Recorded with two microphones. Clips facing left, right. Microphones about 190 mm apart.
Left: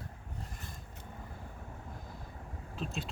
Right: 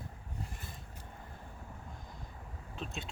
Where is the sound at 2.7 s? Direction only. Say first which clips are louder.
Left 3 dB; centre (ahead or behind).